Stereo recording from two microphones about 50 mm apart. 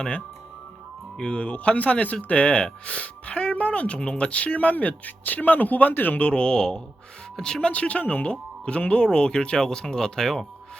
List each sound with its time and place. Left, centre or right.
1.1 s speech: centre
7.7 s speech: left